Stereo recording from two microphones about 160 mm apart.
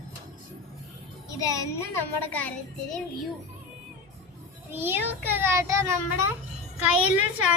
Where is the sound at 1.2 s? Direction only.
20° left (ahead or behind).